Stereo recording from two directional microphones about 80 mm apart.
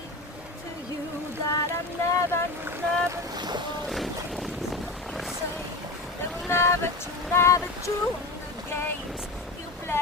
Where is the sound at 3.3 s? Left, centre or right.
Right.